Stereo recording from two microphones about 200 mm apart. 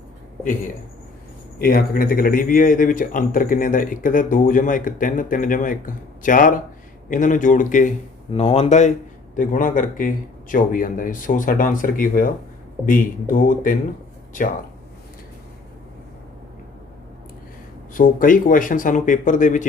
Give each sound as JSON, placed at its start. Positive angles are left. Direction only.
{"t": 1.6, "sound": "speech", "side_deg": 45}
{"t": 8.3, "sound": "speech", "side_deg": 30}
{"t": 17.9, "sound": "speech", "side_deg": 40}